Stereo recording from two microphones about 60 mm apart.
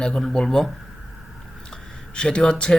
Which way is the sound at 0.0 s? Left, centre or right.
Centre.